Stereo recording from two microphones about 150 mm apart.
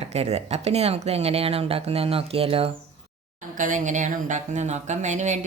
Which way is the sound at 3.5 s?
60° right (ahead or behind).